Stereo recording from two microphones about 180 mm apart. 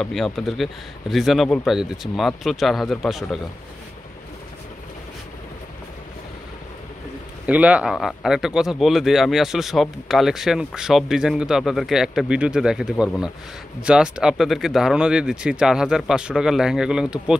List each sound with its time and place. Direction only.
0.0 s speech: centre (ahead or behind)
7.4 s speech: 10° right (ahead or behind)